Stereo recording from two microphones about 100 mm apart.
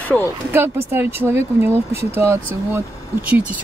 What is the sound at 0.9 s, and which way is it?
Speech, 25° right (ahead or behind).